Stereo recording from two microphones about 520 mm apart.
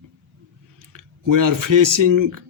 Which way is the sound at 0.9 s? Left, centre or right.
Right.